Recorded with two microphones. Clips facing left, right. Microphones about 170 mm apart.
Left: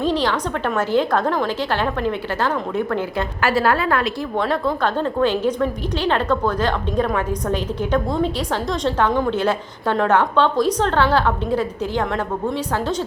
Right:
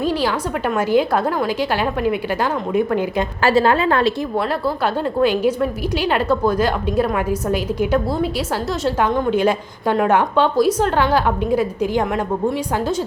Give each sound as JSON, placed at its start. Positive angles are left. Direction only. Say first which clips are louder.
{"t": 0.0, "sound": "a woman's voice", "louder": "even", "side_deg": -10}
{"t": 4.4, "sound": "a woman's voice", "louder": "even", "side_deg": -5}